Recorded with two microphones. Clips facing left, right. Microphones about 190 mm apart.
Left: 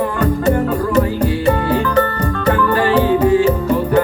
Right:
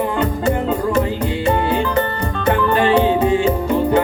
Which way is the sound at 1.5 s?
25° right (ahead or behind).